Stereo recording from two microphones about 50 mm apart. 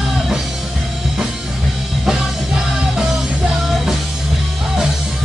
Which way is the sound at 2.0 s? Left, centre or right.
Centre.